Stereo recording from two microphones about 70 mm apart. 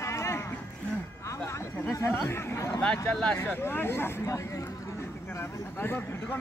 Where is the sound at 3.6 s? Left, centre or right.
Left.